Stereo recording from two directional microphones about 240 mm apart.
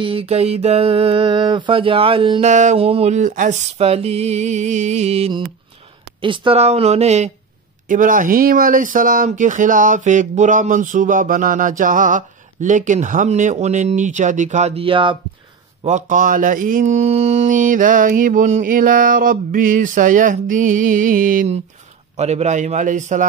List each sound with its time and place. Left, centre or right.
0.0 s speech: right
15.8 s speech: right